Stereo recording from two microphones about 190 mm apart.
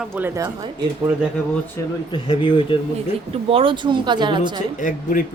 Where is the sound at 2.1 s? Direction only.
25° left (ahead or behind).